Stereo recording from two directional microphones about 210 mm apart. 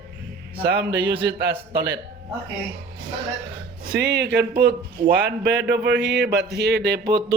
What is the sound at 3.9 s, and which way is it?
A man's voice, 55° right (ahead or behind).